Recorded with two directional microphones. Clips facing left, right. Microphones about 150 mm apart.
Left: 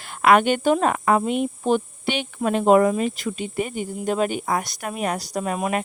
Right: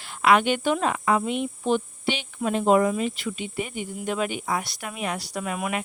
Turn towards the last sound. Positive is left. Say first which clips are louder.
# left 4 dB
turn(degrees=35)  # may be behind; listen again after turning